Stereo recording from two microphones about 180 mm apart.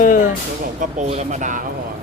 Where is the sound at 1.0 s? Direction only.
40° right (ahead or behind).